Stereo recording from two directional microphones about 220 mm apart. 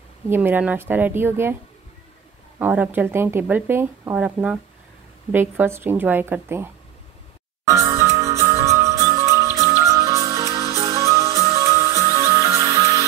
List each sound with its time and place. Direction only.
0.3 s speech: 10° right (ahead or behind)
2.6 s speech: 10° right (ahead or behind)
7.6 s music: 15° right (ahead or behind)